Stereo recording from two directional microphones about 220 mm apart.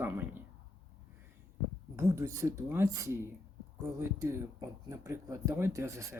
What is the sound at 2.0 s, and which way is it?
Speech, 15° right (ahead or behind).